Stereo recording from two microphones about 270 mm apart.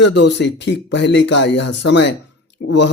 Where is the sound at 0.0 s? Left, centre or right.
Left.